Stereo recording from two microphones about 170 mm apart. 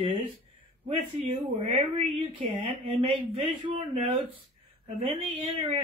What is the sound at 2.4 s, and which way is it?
Speech, 30° right (ahead or behind).